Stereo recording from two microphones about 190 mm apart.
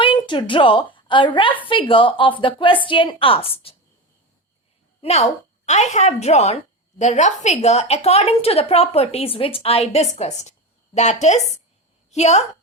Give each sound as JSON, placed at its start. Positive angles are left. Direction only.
{"t": 0.0, "sound": "a woman's voice", "side_deg": 25}
{"t": 4.9, "sound": "a woman's voice", "side_deg": 35}